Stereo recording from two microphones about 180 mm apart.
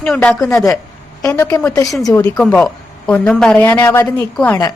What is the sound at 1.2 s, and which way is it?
A woman's voice, 15° left (ahead or behind).